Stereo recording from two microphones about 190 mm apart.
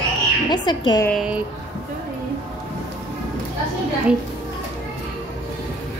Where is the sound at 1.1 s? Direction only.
5° right (ahead or behind).